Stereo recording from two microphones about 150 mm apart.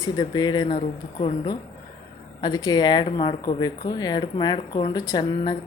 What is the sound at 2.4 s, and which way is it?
Speech, 25° left (ahead or behind).